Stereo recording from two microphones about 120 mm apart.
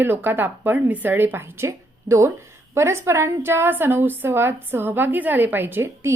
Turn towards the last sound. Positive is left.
turn(degrees=-20)  # may be behind; listen again after turning